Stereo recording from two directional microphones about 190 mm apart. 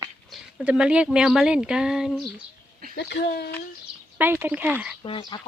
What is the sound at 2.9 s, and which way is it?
Speech, 60° left (ahead or behind).